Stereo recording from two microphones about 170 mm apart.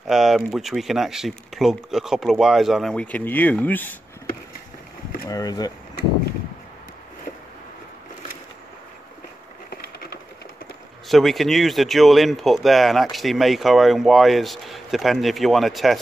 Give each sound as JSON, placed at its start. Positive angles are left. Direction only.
{"t": 0.0, "sound": "speech", "side_deg": 0}
{"t": 5.3, "sound": "speech", "side_deg": 20}
{"t": 11.1, "sound": "speech", "side_deg": 0}